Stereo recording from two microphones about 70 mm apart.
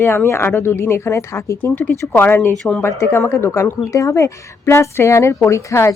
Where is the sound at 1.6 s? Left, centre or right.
Left.